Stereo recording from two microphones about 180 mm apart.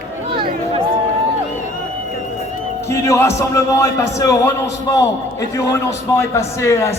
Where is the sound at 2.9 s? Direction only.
15° left (ahead or behind).